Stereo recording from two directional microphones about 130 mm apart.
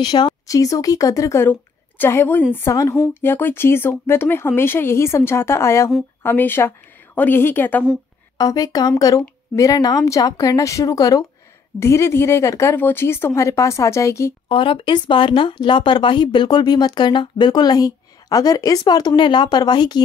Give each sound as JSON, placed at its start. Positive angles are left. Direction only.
{"t": 0.0, "sound": "a woman's voice", "side_deg": 35}
{"t": 8.4, "sound": "speech", "side_deg": 30}
{"t": 14.5, "sound": "speech", "side_deg": 40}